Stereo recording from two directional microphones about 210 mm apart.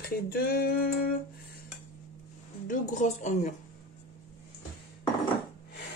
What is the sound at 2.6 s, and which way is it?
Speech, 35° left (ahead or behind).